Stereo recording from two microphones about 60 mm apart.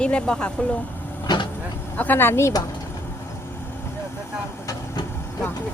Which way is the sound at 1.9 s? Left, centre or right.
Left.